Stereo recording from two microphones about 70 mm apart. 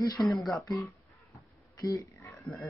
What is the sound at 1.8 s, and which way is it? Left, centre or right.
Speech, left.